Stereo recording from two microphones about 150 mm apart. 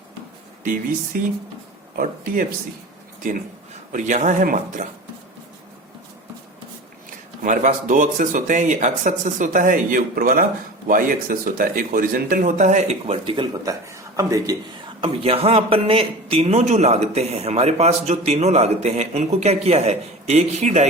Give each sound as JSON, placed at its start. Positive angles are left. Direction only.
{"t": 0.6, "sound": "speech", "side_deg": -65}
{"t": 3.9, "sound": "speech", "side_deg": -55}
{"t": 7.4, "sound": "speech", "side_deg": -60}
{"t": 13.2, "sound": "a man's voice", "side_deg": -30}
{"t": 15.0, "sound": "speech", "side_deg": -40}